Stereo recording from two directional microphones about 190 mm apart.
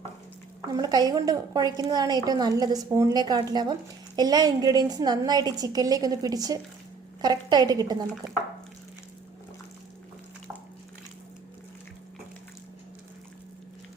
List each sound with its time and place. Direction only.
0.7 s a woman's voice: 20° right (ahead or behind)